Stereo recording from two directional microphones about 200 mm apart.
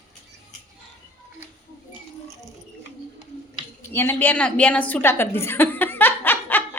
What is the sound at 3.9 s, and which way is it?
A woman's voice, 10° left (ahead or behind).